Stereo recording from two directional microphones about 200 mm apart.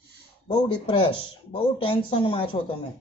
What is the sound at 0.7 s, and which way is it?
Speech, 25° left (ahead or behind).